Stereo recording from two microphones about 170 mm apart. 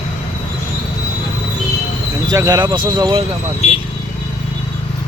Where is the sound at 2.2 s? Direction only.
20° right (ahead or behind).